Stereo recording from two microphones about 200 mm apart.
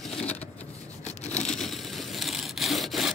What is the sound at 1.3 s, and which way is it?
Wood, 5° left (ahead or behind).